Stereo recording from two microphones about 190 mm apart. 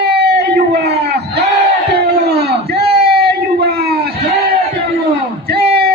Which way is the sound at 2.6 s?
55° right (ahead or behind).